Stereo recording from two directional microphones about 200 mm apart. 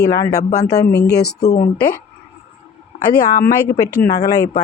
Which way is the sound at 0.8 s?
55° left (ahead or behind).